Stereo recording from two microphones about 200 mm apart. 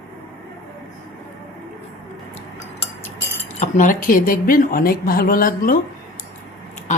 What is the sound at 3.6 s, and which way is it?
Speech, 40° left (ahead or behind).